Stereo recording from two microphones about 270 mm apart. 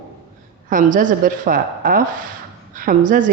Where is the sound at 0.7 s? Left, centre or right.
Right.